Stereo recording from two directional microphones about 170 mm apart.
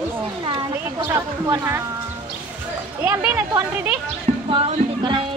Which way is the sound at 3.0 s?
10° right (ahead or behind).